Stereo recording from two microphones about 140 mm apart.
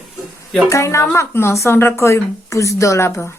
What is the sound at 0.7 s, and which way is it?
Speech, 20° left (ahead or behind).